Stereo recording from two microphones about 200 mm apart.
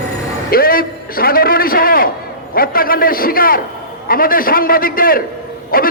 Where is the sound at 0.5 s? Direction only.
45° left (ahead or behind).